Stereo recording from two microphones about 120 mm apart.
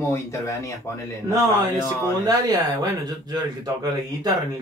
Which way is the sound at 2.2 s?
35° right (ahead or behind).